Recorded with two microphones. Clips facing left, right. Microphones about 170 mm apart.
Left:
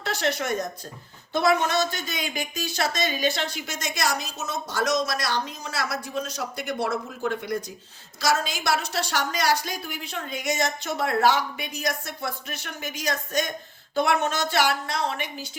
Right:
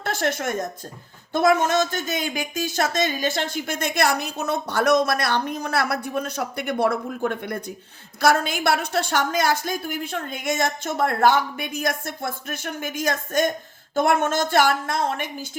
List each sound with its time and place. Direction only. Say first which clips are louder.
0.0 s a woman's voice: right 2 dB; 50° right (ahead or behind)